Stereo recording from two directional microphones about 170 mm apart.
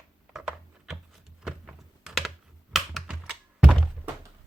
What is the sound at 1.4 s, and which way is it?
Typing, 5° right (ahead or behind).